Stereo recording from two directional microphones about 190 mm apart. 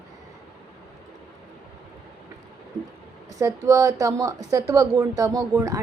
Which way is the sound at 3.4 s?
15° right (ahead or behind).